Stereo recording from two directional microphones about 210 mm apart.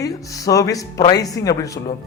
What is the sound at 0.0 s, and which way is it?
A man's voice, 15° left (ahead or behind).